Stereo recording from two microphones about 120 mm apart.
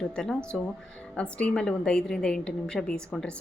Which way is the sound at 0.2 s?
5° left (ahead or behind).